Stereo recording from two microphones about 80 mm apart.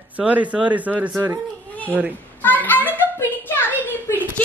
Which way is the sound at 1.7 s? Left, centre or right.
Centre.